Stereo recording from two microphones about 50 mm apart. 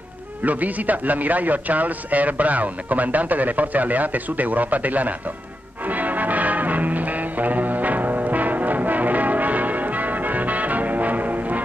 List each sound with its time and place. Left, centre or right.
0.4 s a man's voice: right
5.9 s music: right